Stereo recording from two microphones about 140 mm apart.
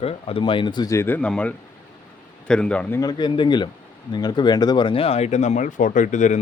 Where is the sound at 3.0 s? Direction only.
30° left (ahead or behind); by 6.4 s 60° left (ahead or behind).